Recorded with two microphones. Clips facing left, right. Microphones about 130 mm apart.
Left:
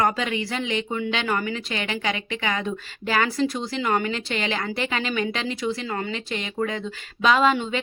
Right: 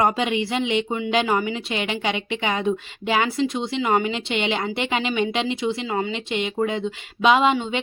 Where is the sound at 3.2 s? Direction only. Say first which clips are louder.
Right 1 dB; centre (ahead or behind).